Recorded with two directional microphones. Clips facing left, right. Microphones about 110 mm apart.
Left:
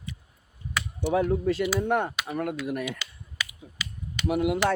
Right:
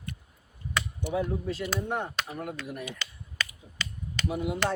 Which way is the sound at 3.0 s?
10° left (ahead or behind).